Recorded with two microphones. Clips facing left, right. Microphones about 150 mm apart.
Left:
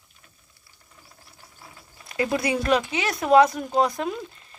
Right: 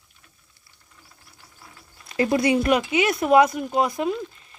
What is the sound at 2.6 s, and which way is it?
Speech, 15° right (ahead or behind).